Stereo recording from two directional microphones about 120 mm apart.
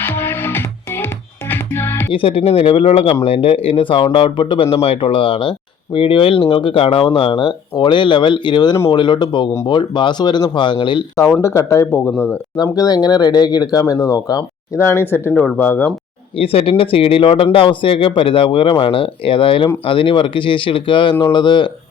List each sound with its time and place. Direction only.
0.0 s music: 15° left (ahead or behind)
2.1 s speech: 55° left (ahead or behind)
11.3 s speech: 25° left (ahead or behind)
12.7 s speech: 30° left (ahead or behind)
15.3 s speech: 10° left (ahead or behind)
16.4 s speech: 50° left (ahead or behind)